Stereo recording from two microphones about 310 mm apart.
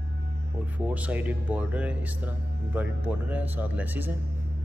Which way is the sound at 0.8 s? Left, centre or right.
Centre.